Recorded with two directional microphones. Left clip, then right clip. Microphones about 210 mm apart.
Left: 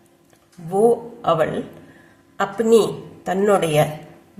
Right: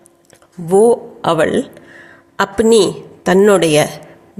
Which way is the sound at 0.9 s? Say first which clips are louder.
Right 4 dB; 40° right (ahead or behind).